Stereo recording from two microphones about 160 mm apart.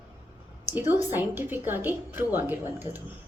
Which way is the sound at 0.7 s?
15° right (ahead or behind).